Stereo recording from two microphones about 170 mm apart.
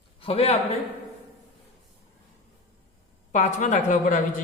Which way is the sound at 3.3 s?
45° left (ahead or behind).